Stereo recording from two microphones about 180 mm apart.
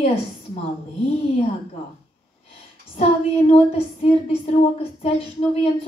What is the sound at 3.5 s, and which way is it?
Speech, 35° left (ahead or behind).